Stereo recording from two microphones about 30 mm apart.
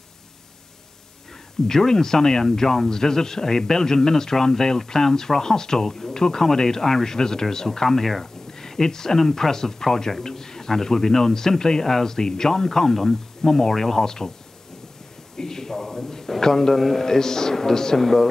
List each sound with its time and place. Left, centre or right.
1.7 s speech: centre
15.3 s a sound: centre
16.3 s speech: centre